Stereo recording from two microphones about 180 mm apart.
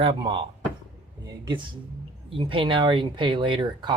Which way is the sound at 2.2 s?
30° right (ahead or behind).